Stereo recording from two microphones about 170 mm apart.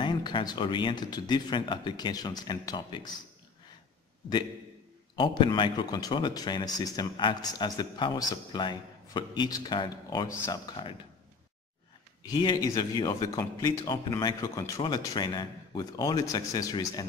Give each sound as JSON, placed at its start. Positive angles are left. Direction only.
{"t": 0.0, "sound": "speech", "side_deg": 25}
{"t": 5.1, "sound": "speech", "side_deg": 30}
{"t": 12.4, "sound": "speech", "side_deg": 25}